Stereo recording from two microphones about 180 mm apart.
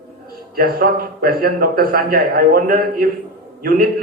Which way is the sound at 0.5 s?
55° right (ahead or behind).